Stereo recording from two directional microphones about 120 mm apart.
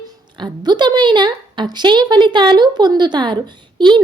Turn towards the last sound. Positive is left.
turn(degrees=-40)  # may be behind; listen again after turning